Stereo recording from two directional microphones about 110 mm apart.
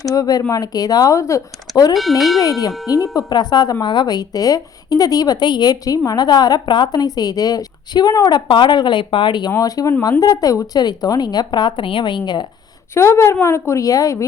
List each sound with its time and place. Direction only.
0.0 s a woman's voice: 35° left (ahead or behind)
2.0 s speech: centre (ahead or behind)
2.4 s a woman's voice: 35° left (ahead or behind)
9.5 s a woman's voice: 30° left (ahead or behind)
12.9 s a woman's voice: 25° left (ahead or behind)